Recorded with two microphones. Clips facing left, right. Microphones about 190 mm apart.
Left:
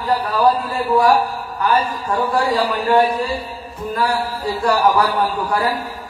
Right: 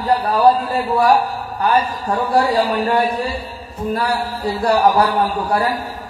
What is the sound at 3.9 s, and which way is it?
A man's voice, 35° right (ahead or behind).